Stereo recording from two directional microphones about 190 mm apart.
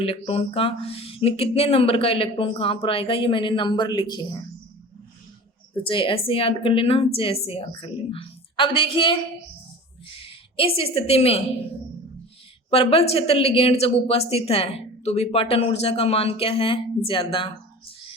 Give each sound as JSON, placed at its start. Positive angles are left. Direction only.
{"t": 0.0, "sound": "speech", "side_deg": 30}
{"t": 5.8, "sound": "speech", "side_deg": 25}
{"t": 10.2, "sound": "a woman's voice", "side_deg": 30}
{"t": 12.7, "sound": "a woman's voice", "side_deg": 30}